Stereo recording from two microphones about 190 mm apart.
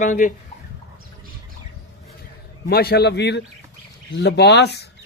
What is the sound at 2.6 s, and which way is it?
A man's voice, 55° left (ahead or behind).